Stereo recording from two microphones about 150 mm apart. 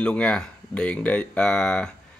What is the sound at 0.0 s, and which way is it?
Speech, 10° left (ahead or behind).